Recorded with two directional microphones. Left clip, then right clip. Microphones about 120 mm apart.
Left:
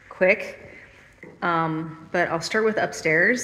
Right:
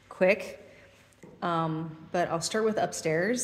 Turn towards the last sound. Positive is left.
turn(degrees=-15)  # may be behind; listen again after turning